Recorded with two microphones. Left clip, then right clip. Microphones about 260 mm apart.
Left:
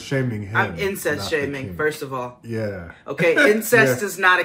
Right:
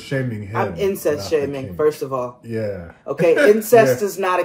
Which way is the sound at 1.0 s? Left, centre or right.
Centre.